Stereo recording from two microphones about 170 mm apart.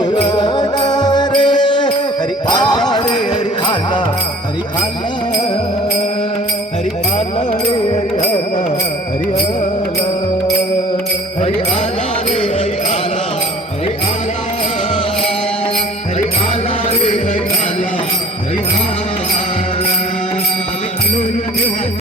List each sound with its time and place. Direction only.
0.0 s music: 25° left (ahead or behind)
2.5 s jingle bell: 25° left (ahead or behind)
7.6 s music: 35° left (ahead or behind)
16.9 s music: 35° left (ahead or behind)